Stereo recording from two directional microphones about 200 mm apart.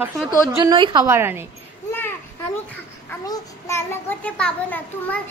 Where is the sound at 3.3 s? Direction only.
15° left (ahead or behind).